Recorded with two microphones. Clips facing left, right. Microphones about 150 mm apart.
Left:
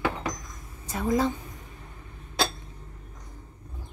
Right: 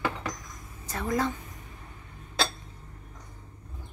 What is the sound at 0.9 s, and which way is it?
Speech, 15° left (ahead or behind).